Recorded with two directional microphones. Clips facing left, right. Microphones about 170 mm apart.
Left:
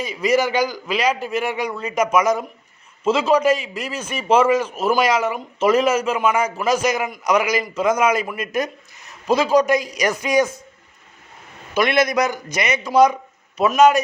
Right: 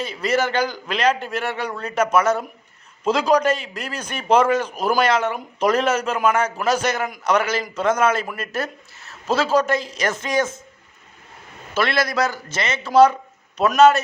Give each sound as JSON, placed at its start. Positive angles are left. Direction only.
{"t": 0.0, "sound": "a man's voice", "side_deg": 10}
{"t": 11.7, "sound": "a man's voice", "side_deg": 15}